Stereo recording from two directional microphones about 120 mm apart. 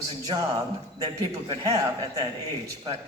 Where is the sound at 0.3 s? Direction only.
35° right (ahead or behind).